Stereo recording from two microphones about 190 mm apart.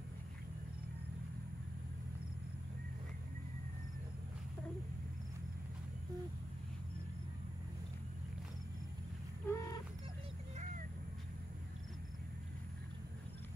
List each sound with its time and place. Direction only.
9.5 s fowl: 15° left (ahead or behind)